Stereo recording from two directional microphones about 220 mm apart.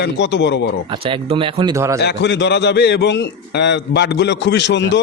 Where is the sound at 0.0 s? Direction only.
50° left (ahead or behind).